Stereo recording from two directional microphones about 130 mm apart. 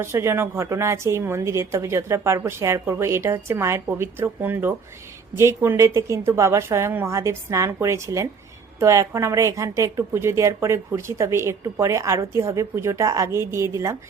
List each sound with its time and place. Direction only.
0.0 s a woman's voice: 20° right (ahead or behind)